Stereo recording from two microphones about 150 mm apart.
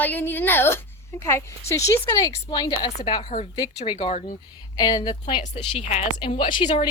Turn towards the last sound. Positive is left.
turn(degrees=35)  # may be behind; listen again after turning